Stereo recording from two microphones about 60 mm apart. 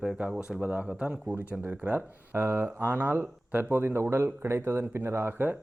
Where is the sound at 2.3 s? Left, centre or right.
Right.